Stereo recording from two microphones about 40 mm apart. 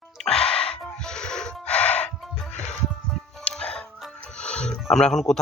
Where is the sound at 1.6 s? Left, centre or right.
Left.